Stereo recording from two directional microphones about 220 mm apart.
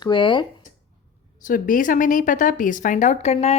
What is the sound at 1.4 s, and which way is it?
A woman's voice, 40° left (ahead or behind).